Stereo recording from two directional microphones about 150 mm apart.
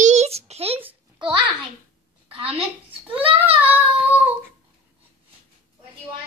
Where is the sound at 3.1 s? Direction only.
35° right (ahead or behind).